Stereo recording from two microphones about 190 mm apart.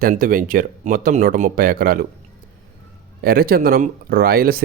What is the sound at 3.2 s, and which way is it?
A man's voice, 50° right (ahead or behind).